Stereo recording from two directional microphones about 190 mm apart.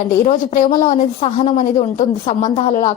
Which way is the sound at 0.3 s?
40° left (ahead or behind).